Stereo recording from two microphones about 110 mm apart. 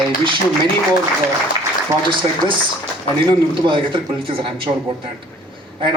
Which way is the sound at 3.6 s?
50° right (ahead or behind).